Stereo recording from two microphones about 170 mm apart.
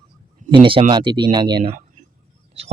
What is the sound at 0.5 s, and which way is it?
Speech, 30° right (ahead or behind).